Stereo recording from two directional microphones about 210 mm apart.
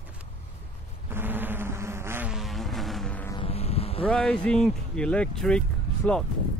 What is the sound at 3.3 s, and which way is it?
Vehicle, 25° left (ahead or behind).